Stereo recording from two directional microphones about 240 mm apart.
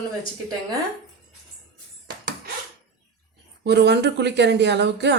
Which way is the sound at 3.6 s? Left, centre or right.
Right.